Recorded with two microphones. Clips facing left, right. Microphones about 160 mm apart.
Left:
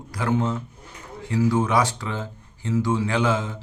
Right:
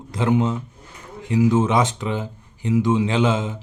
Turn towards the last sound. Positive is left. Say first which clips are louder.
# right 3 dB
turn(degrees=-20)  # may be behind; listen again after turning